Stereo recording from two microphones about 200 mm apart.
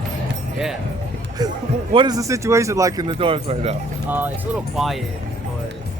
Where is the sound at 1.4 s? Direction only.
20° right (ahead or behind).